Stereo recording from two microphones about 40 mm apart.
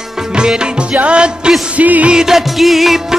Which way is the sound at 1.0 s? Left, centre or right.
Right.